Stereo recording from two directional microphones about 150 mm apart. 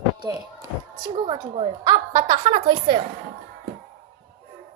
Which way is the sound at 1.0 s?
35° right (ahead or behind).